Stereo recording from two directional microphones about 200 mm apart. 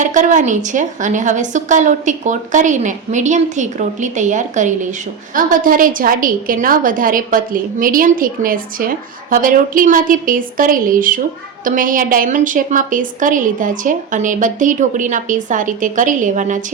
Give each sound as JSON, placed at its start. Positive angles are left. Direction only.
{"t": 0.0, "sound": "a woman's voice", "side_deg": -40}